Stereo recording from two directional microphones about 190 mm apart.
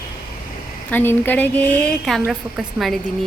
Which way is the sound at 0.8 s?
10° left (ahead or behind).